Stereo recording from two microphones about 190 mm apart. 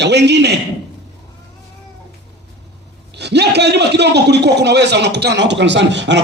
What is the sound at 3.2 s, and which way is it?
A man's voice, 60° right (ahead or behind).